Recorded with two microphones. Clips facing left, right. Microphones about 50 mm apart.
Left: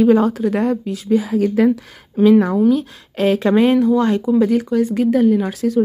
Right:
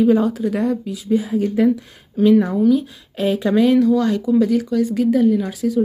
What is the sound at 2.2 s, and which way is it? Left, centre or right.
Speech, left.